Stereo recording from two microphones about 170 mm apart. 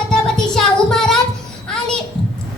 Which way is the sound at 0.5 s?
5° left (ahead or behind).